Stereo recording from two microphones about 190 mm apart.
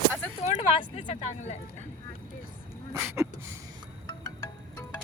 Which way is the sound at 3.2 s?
15° right (ahead or behind).